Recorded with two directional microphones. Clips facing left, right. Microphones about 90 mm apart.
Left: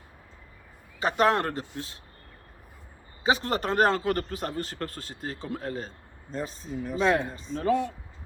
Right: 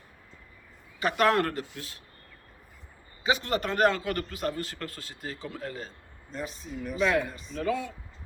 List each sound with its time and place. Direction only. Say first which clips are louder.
0.9 s speech: left 1 dB; 25° left (ahead or behind)
3.2 s a man's voice: left 2 dB; 40° left (ahead or behind)